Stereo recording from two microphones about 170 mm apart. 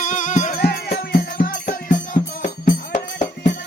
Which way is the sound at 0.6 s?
70° left (ahead or behind).